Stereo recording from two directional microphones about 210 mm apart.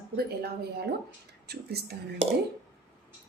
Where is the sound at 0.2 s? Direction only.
45° right (ahead or behind).